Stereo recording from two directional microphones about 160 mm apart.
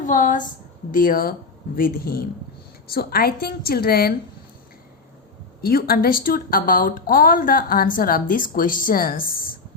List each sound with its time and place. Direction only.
0.0 s a woman's voice: 55° left (ahead or behind); by 4.1 s 75° left (ahead or behind)
5.6 s a woman's voice: 70° left (ahead or behind)